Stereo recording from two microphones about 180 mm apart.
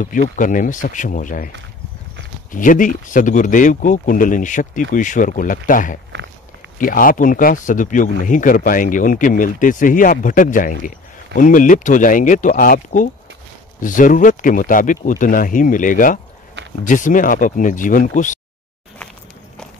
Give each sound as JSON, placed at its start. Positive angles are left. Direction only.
{"t": 0.0, "sound": "speech", "side_deg": 45}
{"t": 2.5, "sound": "speech", "side_deg": 45}